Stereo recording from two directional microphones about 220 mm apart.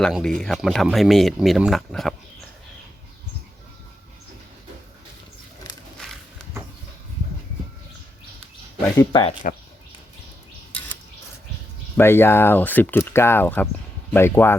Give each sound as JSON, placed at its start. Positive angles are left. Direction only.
{"t": 0.0, "sound": "speech", "side_deg": 0}
{"t": 6.0, "sound": "a sound", "side_deg": 0}
{"t": 9.0, "sound": "speech", "side_deg": 20}
{"t": 11.9, "sound": "speech", "side_deg": 10}